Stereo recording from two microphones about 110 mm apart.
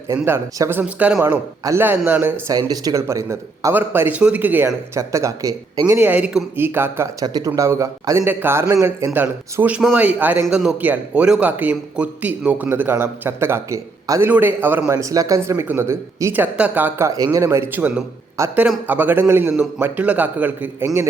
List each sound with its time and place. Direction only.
0.3 s a man's voice: 20° right (ahead or behind)
2.5 s a man's voice: 35° right (ahead or behind); by 4.7 s 15° right (ahead or behind)
4.9 s speech: 30° right (ahead or behind)
5.8 s a man's voice: 15° right (ahead or behind)
14.3 s a man's voice: 15° right (ahead or behind)
18.4 s a man's voice: 25° right (ahead or behind)
18.9 s a man's voice: 15° right (ahead or behind)
20.8 s a man's voice: 25° right (ahead or behind)